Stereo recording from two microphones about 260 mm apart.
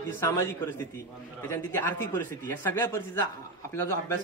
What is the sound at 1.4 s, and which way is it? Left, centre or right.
Speech, centre.